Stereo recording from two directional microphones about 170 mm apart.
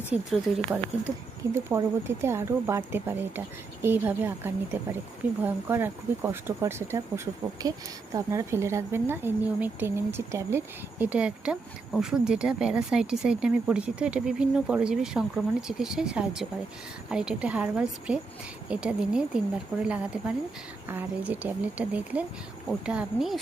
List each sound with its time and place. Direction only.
0.1 s speech: 10° right (ahead or behind)
8.1 s speech: 20° right (ahead or behind)